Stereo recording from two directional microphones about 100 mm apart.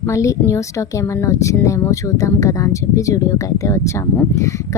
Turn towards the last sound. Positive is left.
turn(degrees=30)  # may be behind; listen again after turning